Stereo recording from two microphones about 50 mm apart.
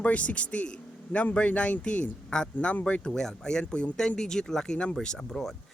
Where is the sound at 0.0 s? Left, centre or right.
Left.